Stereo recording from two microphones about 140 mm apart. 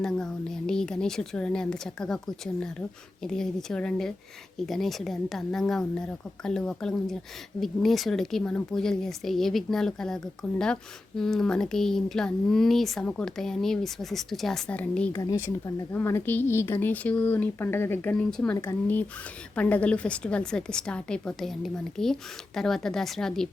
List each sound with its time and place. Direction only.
0.0 s speech: 5° left (ahead or behind)
15.1 s speech: 25° left (ahead or behind); by 18.5 s 5° left (ahead or behind)
19.5 s speech: 10° left (ahead or behind)